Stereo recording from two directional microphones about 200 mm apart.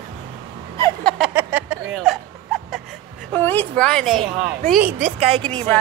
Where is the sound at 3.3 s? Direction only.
10° left (ahead or behind); by 5.0 s 5° right (ahead or behind).